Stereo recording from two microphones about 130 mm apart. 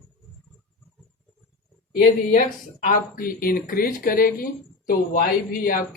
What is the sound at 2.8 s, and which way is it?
Speech, 90° left.